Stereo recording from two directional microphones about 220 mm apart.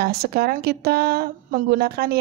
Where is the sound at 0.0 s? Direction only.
45° right (ahead or behind).